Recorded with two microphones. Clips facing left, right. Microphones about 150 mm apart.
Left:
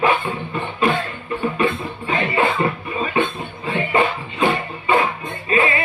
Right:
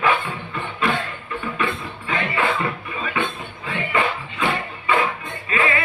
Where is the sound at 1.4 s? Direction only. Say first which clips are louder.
Left 6 dB; 30° left (ahead or behind).